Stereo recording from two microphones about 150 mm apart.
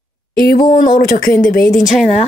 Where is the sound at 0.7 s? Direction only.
65° left (ahead or behind).